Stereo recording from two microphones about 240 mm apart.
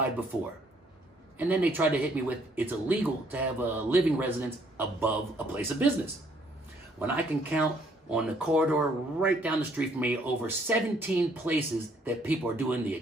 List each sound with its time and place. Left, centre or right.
1.4 s speech: centre
7.0 s speech: centre